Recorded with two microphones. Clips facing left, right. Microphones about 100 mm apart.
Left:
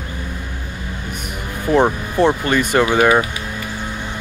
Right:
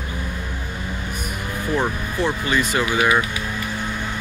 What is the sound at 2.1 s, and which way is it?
Speech, 55° left (ahead or behind).